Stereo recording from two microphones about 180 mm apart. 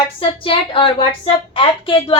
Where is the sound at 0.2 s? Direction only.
30° left (ahead or behind).